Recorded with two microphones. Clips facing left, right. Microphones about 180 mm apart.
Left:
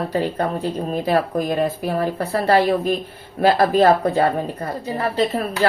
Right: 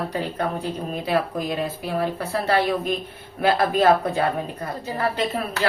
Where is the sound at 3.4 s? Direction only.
40° left (ahead or behind).